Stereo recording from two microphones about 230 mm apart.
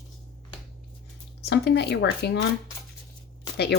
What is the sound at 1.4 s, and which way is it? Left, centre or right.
Speech, left.